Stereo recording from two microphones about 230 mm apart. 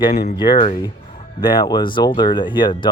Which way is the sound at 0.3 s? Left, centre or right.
Centre.